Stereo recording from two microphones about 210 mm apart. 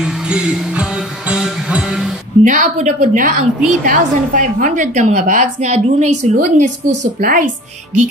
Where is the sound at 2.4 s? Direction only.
35° right (ahead or behind).